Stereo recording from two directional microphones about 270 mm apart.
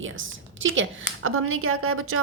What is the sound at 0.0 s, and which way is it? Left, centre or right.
A woman's voice, right.